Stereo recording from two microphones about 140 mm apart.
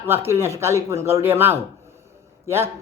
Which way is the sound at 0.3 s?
20° right (ahead or behind).